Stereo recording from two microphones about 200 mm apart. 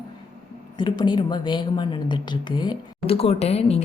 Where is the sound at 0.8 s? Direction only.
20° left (ahead or behind).